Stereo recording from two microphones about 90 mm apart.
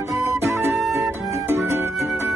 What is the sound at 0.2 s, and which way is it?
Music, 30° right (ahead or behind).